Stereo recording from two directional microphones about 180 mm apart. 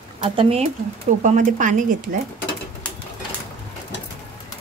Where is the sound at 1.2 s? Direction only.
45° right (ahead or behind).